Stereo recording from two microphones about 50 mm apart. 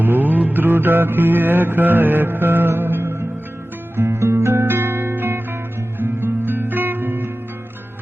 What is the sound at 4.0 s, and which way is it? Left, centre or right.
Music, right.